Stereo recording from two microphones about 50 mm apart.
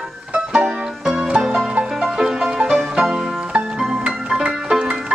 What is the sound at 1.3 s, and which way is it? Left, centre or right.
Music, right.